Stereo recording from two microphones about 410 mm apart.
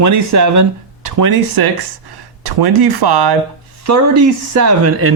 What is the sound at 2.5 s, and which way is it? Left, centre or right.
Speech, right.